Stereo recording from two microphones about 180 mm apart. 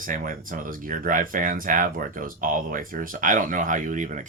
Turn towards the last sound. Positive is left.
turn(degrees=-45)  # may be behind; listen again after turning